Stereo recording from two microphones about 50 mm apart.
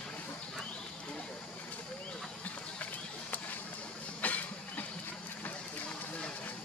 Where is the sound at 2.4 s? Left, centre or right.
Left.